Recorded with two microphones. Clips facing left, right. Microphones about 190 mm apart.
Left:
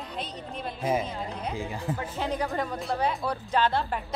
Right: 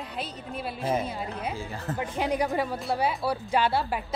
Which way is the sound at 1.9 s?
15° right (ahead or behind).